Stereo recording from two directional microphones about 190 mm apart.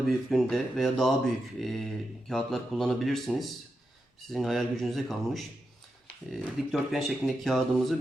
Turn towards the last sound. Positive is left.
turn(degrees=0)  # may be behind; listen again after turning